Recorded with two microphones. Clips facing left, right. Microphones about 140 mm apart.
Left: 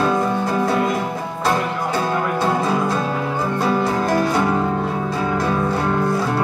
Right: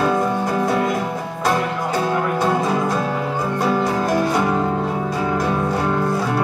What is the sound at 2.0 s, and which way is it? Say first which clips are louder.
Music: right 1 dB; 10° right (ahead or behind).